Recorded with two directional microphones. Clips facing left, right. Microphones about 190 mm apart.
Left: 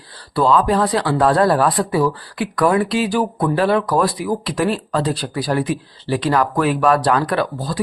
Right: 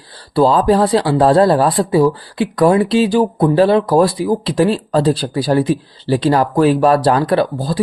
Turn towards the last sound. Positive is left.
turn(degrees=-30)  # may be behind; listen again after turning